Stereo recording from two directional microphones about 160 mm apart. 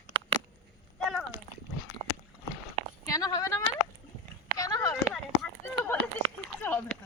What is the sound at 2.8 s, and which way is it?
Sheep, 40° right (ahead or behind).